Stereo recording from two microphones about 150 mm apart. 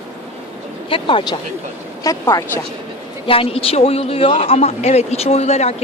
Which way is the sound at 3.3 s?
40° left (ahead or behind).